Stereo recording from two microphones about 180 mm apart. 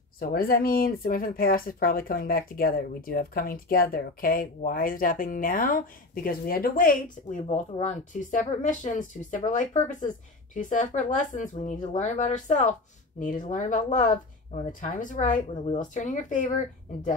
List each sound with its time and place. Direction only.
0.2 s speech: 55° left (ahead or behind)